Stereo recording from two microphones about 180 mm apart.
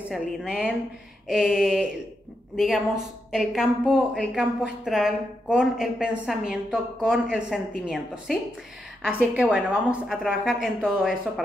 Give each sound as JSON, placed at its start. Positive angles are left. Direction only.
{"t": 0.1, "sound": "a woman's voice", "side_deg": -5}